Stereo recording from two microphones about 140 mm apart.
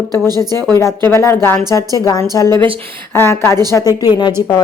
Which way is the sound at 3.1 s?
15° left (ahead or behind).